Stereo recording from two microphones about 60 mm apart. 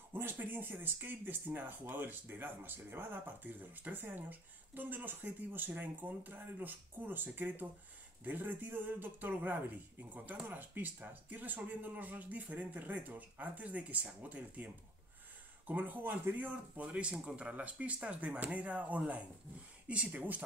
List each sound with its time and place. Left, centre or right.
0.1 s speech: right